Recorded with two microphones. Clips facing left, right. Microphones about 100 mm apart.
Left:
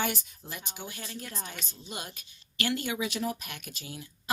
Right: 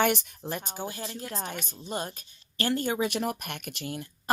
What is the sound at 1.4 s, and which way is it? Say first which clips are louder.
A woman's voice: right 6 dB; 55° right (ahead or behind).